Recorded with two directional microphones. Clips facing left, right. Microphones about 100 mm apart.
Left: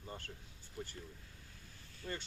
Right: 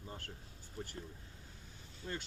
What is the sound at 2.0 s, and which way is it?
Speech, 20° right (ahead or behind).